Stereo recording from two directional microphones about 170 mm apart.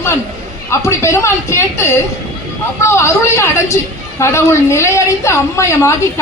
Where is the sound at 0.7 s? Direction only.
15° left (ahead or behind).